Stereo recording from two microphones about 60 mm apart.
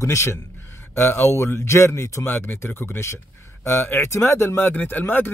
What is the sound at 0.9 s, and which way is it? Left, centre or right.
A man's voice, left.